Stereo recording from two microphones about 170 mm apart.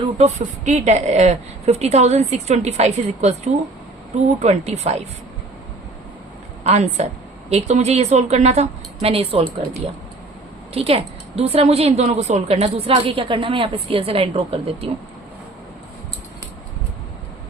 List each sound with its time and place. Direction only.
0.3 s a woman's voice: 45° right (ahead or behind)
6.7 s a woman's voice: 40° right (ahead or behind)